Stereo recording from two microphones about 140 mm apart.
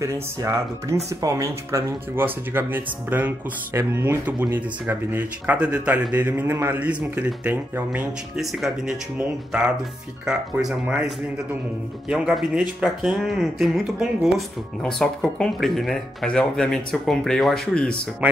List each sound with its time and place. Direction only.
0.0 s speech: 20° right (ahead or behind); by 17.9 s 5° left (ahead or behind)